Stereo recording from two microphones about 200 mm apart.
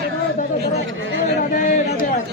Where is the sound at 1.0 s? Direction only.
70° right (ahead or behind).